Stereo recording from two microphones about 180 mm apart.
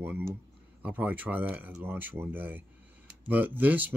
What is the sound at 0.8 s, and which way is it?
Speech, 10° right (ahead or behind).